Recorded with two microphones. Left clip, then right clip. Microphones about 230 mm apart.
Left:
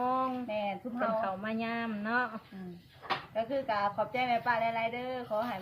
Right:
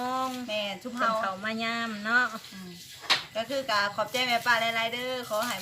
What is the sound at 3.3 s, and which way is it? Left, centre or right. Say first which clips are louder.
Speech: right 4 dB; centre.